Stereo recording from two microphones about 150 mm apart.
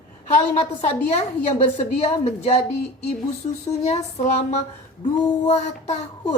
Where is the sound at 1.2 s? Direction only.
45° left (ahead or behind).